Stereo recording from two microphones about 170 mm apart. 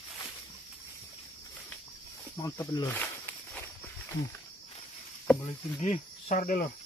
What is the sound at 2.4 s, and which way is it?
Insect, 20° left (ahead or behind).